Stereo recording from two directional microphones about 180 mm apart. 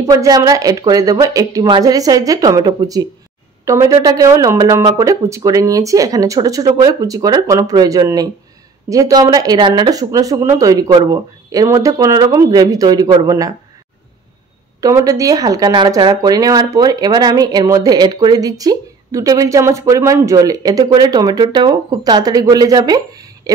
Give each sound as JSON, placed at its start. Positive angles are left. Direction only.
{"t": 0.0, "sound": "speech", "side_deg": -20}
{"t": 14.8, "sound": "speech", "side_deg": -20}